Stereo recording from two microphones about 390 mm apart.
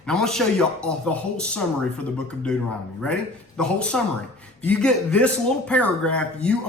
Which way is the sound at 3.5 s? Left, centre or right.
Centre.